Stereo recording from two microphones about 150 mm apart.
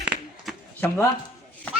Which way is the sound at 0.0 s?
5° right (ahead or behind).